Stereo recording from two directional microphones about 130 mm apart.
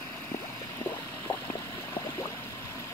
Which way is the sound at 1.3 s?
25° left (ahead or behind).